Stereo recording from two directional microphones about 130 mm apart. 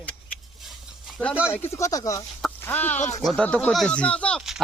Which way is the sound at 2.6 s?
15° left (ahead or behind).